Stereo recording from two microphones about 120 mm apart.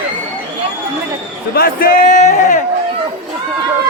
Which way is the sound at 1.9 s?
90° left.